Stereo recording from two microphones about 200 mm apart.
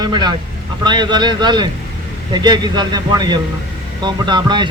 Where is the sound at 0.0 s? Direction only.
20° right (ahead or behind).